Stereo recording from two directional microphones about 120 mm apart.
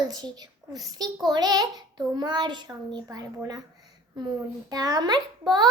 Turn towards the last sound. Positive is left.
turn(degrees=-35)  # may be behind; listen again after turning